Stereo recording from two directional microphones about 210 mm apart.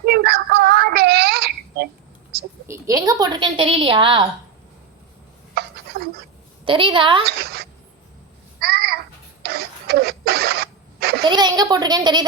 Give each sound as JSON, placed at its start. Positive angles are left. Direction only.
{"t": 0.0, "sound": "child singing", "side_deg": -50}
{"t": 2.6, "sound": "a woman's voice", "side_deg": -15}
{"t": 5.5, "sound": "a sound", "side_deg": -50}
{"t": 6.7, "sound": "a woman's voice", "side_deg": -25}
{"t": 7.3, "sound": "speech", "side_deg": -50}
{"t": 8.6, "sound": "babbling", "side_deg": -50}
{"t": 9.4, "sound": "printer", "side_deg": -50}
{"t": 11.3, "sound": "a woman's voice", "side_deg": -20}